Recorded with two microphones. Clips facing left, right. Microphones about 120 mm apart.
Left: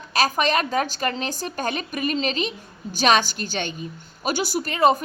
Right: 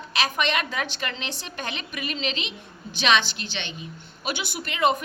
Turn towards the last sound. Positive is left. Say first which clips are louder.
# left 4 dB
turn(degrees=35)  # may be behind; listen again after turning